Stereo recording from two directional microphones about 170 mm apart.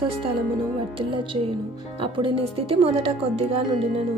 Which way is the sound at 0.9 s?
30° right (ahead or behind).